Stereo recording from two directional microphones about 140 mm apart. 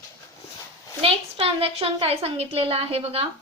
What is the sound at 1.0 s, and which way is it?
A woman's voice, 45° right (ahead or behind).